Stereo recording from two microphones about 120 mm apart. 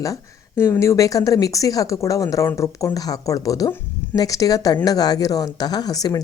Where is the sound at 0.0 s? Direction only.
25° left (ahead or behind).